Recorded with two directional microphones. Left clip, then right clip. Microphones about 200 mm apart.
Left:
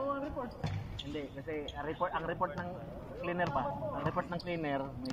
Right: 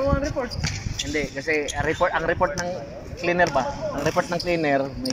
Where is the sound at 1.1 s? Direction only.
45° right (ahead or behind).